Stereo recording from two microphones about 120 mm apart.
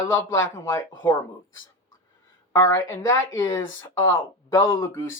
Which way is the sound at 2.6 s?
20° left (ahead or behind).